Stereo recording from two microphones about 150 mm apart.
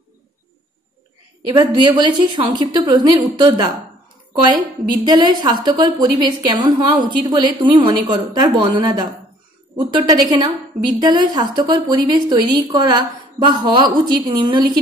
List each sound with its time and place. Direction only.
1.6 s a woman's voice: 30° right (ahead or behind)
10.3 s a woman's voice: 25° right (ahead or behind)